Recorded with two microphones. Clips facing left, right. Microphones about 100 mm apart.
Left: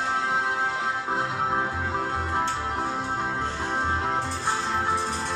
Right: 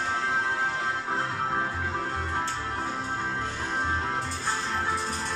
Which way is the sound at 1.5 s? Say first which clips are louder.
Left 3 dB; 25° left (ahead or behind).